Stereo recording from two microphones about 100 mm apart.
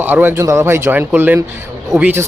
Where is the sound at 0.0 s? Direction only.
20° right (ahead or behind).